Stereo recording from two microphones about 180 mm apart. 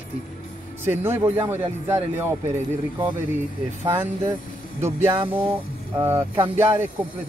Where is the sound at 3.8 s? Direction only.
15° right (ahead or behind).